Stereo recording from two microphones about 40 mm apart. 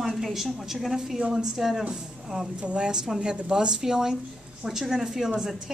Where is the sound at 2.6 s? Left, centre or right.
Right.